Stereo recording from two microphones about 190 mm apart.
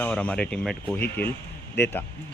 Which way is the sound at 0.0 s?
5° left (ahead or behind).